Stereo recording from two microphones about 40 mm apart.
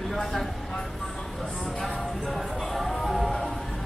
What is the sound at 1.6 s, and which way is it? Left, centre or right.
Music, centre.